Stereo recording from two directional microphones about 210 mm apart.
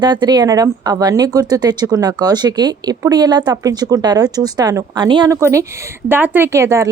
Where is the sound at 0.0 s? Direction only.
20° right (ahead or behind).